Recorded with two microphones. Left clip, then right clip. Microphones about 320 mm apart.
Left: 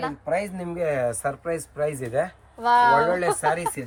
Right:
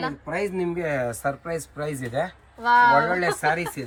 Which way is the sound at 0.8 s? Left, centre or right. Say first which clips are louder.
Left 6 dB; centre.